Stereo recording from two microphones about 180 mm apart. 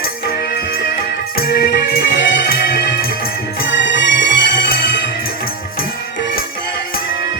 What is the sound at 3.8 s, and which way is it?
Music, 80° left.